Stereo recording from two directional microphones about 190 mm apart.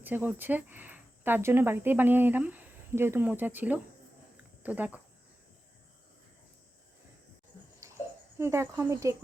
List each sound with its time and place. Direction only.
0.0 s a woman's voice: 10° right (ahead or behind)
7.8 s babbling: 15° right (ahead or behind)
8.4 s a woman's voice: 15° right (ahead or behind)